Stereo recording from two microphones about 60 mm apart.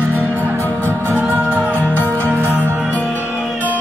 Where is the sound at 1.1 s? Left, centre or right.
Right.